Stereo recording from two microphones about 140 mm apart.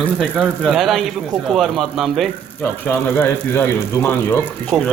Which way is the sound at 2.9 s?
15° left (ahead or behind).